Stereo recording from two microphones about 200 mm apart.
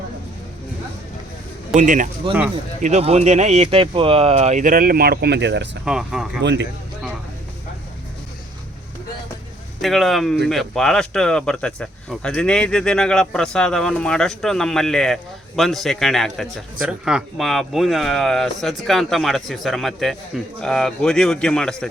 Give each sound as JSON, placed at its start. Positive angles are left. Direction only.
{"t": 1.7, "sound": "speech", "side_deg": -40}
{"t": 5.8, "sound": "speech", "side_deg": -5}
{"t": 6.4, "sound": "speech", "side_deg": -60}
{"t": 9.8, "sound": "speech", "side_deg": 0}